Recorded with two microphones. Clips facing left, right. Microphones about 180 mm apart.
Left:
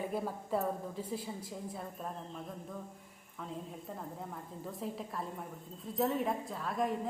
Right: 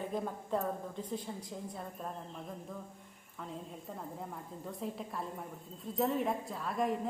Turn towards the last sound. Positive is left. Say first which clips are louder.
# right 1 dB
turn(degrees=0)  # may be behind; listen again after turning